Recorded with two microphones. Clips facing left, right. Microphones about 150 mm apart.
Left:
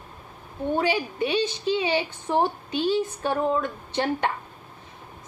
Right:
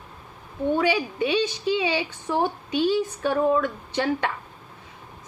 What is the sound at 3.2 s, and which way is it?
Speech, 20° left (ahead or behind).